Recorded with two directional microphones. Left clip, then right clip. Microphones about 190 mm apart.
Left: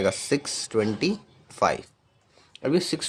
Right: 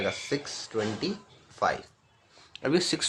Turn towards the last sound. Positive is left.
turn(degrees=25)  # may be behind; listen again after turning